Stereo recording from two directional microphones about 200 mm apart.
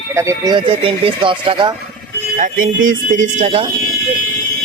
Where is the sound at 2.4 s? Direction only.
40° right (ahead or behind).